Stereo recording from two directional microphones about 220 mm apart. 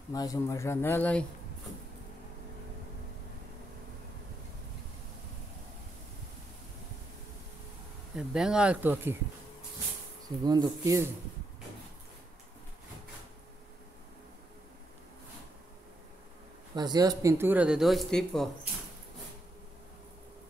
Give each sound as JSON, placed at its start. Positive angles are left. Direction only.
{"t": 0.1, "sound": "speech", "side_deg": 15}
{"t": 8.2, "sound": "speech", "side_deg": -5}
{"t": 10.4, "sound": "speech", "side_deg": -20}
{"t": 16.7, "sound": "speech", "side_deg": -20}